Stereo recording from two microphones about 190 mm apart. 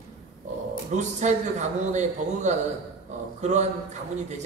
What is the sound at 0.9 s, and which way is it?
A man's voice, 40° right (ahead or behind).